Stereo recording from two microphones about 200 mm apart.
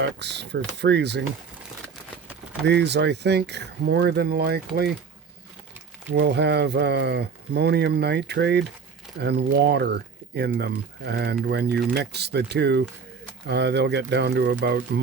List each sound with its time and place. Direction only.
0.0 s speech: 60° right (ahead or behind)
2.6 s speech: 55° right (ahead or behind)
6.1 s speech: 55° right (ahead or behind)